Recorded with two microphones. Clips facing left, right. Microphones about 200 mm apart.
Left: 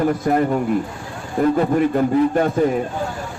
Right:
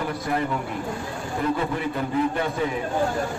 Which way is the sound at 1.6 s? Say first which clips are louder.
Left 9 dB; 45° left (ahead or behind).